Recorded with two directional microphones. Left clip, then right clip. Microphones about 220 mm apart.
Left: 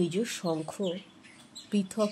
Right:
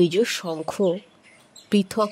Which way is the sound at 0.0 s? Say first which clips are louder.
Right 10 dB; 40° right (ahead or behind).